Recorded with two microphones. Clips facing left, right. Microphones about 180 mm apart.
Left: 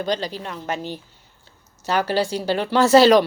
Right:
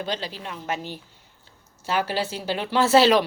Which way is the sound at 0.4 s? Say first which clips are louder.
Left 2 dB; 5° right (ahead or behind).